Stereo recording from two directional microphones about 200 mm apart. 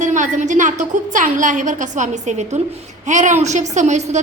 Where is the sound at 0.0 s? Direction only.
40° right (ahead or behind).